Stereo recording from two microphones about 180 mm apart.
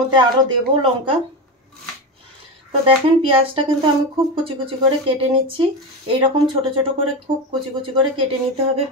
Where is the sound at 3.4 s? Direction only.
30° right (ahead or behind).